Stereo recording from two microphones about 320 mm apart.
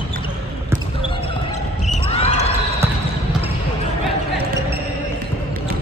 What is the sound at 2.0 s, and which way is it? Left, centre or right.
Heart sounds, centre.